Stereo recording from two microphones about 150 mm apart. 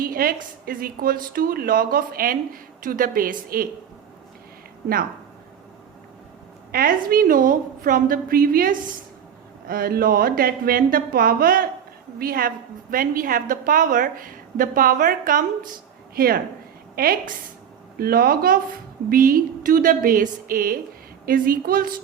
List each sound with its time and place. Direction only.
0.0 s a woman's voice: 75° right (ahead or behind)
6.7 s a woman's voice: 80° right
16.1 s a woman's voice: 80° right